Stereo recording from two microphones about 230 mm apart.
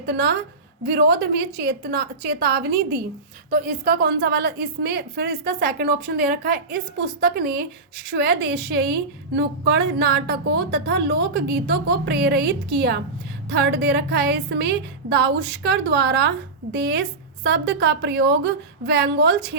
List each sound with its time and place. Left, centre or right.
0.0 s a woman's voice: right